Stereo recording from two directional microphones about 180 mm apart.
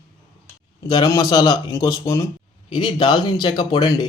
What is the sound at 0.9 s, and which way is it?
Speech, 20° left (ahead or behind).